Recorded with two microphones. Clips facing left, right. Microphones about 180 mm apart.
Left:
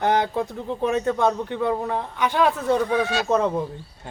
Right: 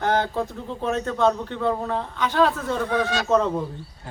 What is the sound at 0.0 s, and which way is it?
A man's voice, 15° left (ahead or behind).